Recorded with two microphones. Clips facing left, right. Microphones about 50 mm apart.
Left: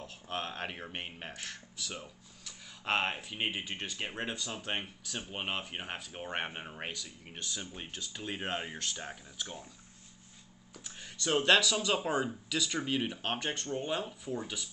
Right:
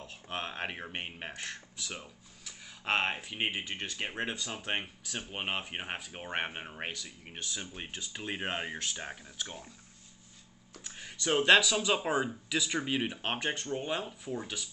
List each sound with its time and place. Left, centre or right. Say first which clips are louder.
0.0 s speech: even; centre
7.6 s speech: right 1 dB; right
10.7 s speech: right 2 dB; centre